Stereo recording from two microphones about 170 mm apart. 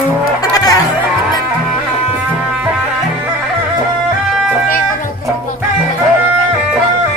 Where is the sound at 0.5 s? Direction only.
20° left (ahead or behind).